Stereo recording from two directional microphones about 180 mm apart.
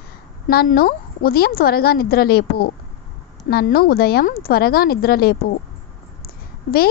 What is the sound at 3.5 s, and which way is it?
Speech, 60° left (ahead or behind).